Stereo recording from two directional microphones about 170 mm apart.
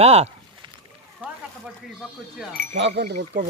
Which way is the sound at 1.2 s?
5° right (ahead or behind).